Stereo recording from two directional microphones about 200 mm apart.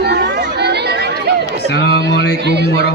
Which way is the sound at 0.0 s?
55° right (ahead or behind).